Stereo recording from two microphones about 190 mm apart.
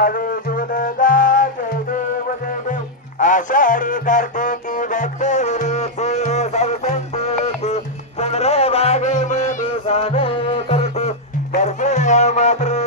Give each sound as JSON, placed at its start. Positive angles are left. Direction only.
{"t": 0.0, "sound": "music", "side_deg": 50}
{"t": 2.7, "sound": "music", "side_deg": 40}